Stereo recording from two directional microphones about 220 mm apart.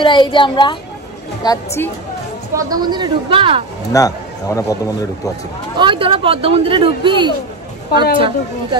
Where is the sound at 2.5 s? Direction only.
20° right (ahead or behind).